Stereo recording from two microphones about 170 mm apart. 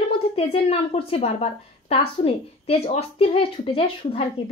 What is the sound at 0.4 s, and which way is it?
A woman's voice, 35° left (ahead or behind).